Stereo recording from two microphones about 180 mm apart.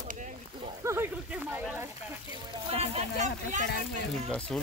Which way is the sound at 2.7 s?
35° right (ahead or behind).